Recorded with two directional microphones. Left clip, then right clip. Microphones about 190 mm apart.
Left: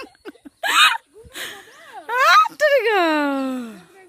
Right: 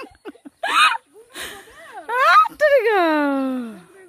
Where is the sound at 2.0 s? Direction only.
Centre (ahead or behind).